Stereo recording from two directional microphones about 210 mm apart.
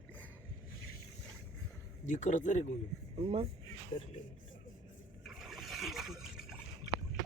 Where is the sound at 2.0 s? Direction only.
35° left (ahead or behind).